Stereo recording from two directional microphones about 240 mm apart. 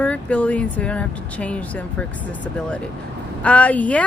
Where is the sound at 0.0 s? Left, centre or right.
Centre.